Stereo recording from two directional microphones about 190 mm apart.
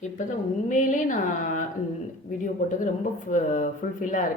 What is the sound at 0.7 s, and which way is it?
Speech, 45° left (ahead or behind).